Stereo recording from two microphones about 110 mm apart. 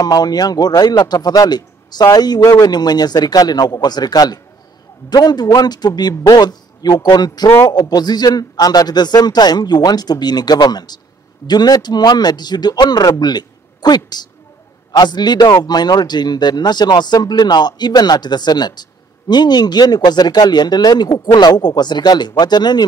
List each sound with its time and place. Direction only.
0.0 s speech: 35° left (ahead or behind)